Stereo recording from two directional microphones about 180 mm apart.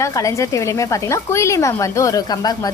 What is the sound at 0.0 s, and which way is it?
A woman's voice, 15° left (ahead or behind).